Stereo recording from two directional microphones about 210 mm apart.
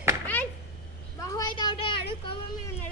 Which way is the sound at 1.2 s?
15° left (ahead or behind).